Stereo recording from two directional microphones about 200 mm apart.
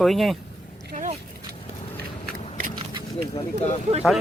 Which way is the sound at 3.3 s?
30° left (ahead or behind).